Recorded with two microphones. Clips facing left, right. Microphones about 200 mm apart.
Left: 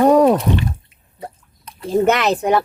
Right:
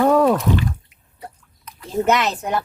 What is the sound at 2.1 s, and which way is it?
Speech, 60° left (ahead or behind).